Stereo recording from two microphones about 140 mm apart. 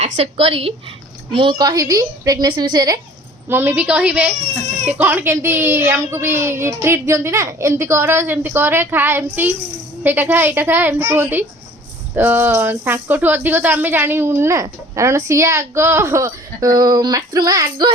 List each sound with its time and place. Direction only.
0.0 s speech: 45° right (ahead or behind); by 3.0 s 30° right (ahead or behind)
3.5 s a woman's voice: 15° right (ahead or behind)